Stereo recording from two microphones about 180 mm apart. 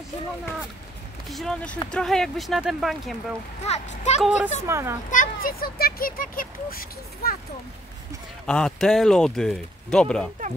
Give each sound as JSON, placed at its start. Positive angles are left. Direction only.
{"t": 1.3, "sound": "speech", "side_deg": 0}
{"t": 3.6, "sound": "a child's voice", "side_deg": 40}
{"t": 4.6, "sound": "a child's voice", "side_deg": -15}
{"t": 5.1, "sound": "speech", "side_deg": 50}
{"t": 8.5, "sound": "speech", "side_deg": 5}